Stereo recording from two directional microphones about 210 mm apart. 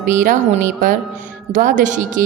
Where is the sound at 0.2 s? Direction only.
40° right (ahead or behind).